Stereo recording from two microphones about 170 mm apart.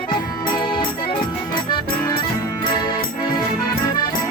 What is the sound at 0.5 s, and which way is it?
Accordion, 30° left (ahead or behind).